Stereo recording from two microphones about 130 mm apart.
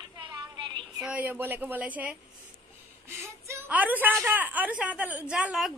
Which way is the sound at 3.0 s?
20° right (ahead or behind).